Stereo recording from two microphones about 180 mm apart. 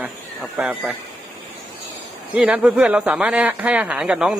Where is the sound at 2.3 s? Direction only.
5° right (ahead or behind).